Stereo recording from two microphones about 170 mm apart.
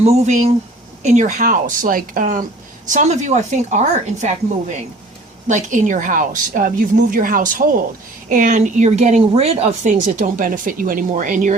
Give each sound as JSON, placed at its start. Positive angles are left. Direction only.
{"t": 0.0, "sound": "speech", "side_deg": -40}
{"t": 5.5, "sound": "speech", "side_deg": -45}